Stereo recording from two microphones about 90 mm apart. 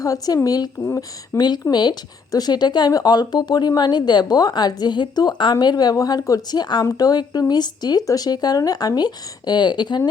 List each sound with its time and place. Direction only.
0.0 s a woman's voice: 40° left (ahead or behind)
0.9 s speech: 30° left (ahead or behind)
1.4 s a woman's voice: 55° left (ahead or behind)